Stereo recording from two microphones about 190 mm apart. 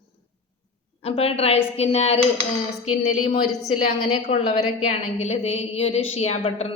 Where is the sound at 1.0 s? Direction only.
30° left (ahead or behind).